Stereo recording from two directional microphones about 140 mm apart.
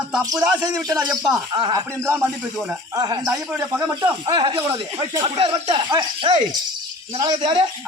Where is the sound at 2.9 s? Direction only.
30° right (ahead or behind).